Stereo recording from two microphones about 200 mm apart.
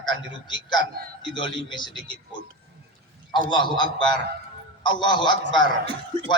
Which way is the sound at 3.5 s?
25° left (ahead or behind).